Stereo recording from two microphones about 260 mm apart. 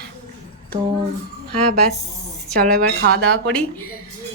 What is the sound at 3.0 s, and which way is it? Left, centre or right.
Speech, right.